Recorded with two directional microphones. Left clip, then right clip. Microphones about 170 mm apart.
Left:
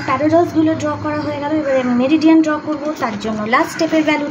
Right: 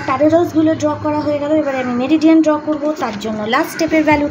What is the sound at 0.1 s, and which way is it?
A woman's voice, 20° right (ahead or behind).